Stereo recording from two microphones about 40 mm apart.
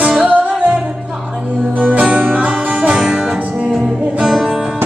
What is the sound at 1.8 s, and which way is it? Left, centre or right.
Music, right.